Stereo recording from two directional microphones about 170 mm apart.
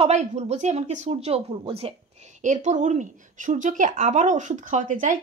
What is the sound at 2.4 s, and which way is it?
Speech, 45° right (ahead or behind).